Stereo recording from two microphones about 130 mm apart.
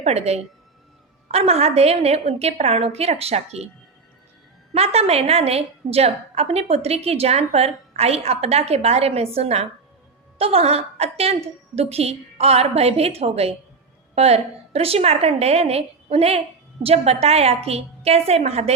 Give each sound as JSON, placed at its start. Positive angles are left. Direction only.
{"t": 0.0, "sound": "a woman's voice", "side_deg": -55}
{"t": 4.7, "sound": "a woman's voice", "side_deg": -50}